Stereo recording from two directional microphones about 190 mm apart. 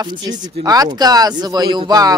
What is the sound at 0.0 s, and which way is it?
A woman's voice, 20° right (ahead or behind).